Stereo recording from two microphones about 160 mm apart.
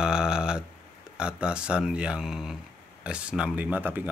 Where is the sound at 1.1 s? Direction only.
5° right (ahead or behind).